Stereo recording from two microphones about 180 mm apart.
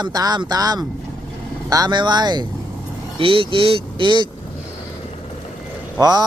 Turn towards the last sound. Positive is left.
turn(degrees=-20)  # may be behind; listen again after turning